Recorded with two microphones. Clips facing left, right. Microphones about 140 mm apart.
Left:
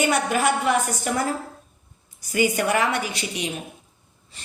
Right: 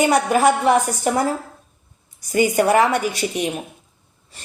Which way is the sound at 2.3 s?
40° right (ahead or behind).